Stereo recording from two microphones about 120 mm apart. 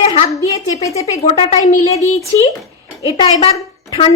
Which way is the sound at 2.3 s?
35° left (ahead or behind).